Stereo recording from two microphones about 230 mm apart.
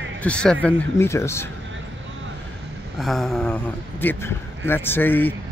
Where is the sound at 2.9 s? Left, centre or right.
Centre.